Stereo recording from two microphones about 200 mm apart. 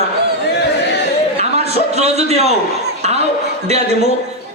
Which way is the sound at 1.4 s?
30° right (ahead or behind).